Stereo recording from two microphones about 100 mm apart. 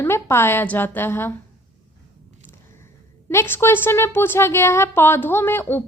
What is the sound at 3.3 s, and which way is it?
A woman's voice, 25° left (ahead or behind).